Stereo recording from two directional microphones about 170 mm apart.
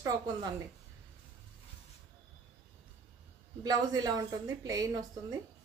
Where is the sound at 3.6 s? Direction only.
25° right (ahead or behind).